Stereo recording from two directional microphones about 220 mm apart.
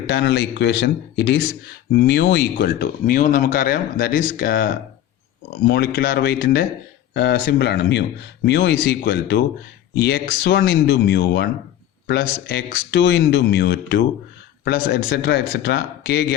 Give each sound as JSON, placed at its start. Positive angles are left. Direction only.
{"t": 0.1, "sound": "speech", "side_deg": 50}